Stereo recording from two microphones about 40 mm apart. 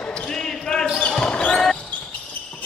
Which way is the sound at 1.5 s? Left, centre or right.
Centre.